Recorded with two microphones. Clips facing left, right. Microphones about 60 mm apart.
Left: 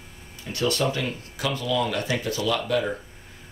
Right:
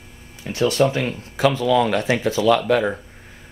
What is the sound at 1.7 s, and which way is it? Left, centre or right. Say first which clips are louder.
Speech: right 5 dB; right.